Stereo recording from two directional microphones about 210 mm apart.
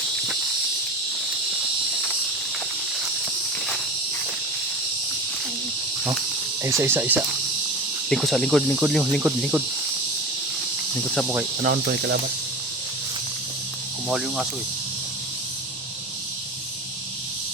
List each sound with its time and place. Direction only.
6.6 s speech: 15° right (ahead or behind)
8.1 s cricket: centre (ahead or behind)
11.6 s cricket: 50° right (ahead or behind)
14.1 s cricket: centre (ahead or behind)